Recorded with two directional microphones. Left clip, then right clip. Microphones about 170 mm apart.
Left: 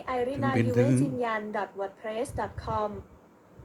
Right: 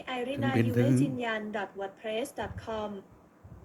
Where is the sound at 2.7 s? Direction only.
15° right (ahead or behind).